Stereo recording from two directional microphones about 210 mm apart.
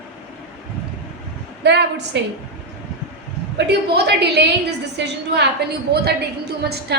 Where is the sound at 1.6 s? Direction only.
55° right (ahead or behind).